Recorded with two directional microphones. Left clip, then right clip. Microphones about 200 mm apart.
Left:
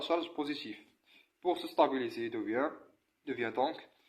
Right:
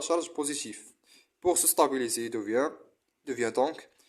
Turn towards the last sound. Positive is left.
turn(degrees=-35)  # may be behind; listen again after turning